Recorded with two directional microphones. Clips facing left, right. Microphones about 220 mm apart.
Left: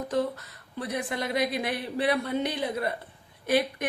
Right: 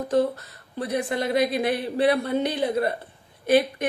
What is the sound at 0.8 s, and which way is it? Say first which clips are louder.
A woman's voice: right 5 dB; 30° right (ahead or behind).